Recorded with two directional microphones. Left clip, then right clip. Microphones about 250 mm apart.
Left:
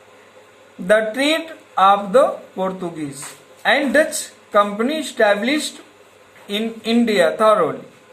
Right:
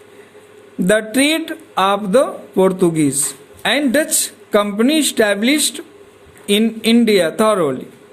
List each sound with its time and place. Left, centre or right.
0.9 s speech: right